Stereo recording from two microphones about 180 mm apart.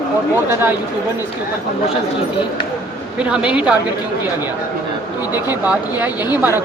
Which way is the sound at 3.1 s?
5° right (ahead or behind).